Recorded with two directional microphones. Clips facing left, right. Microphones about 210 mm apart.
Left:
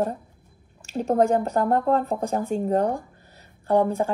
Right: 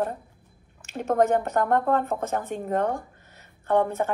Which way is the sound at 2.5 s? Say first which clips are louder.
Left 5 dB; 35° left (ahead or behind).